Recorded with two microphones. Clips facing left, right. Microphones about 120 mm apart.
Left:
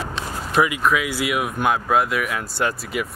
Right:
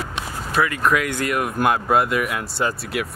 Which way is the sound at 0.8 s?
Centre (ahead or behind).